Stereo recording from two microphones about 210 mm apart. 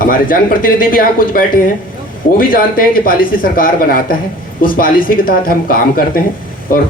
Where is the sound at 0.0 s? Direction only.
40° left (ahead or behind).